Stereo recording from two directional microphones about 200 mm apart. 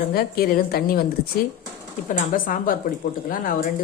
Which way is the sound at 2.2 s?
45° left (ahead or behind).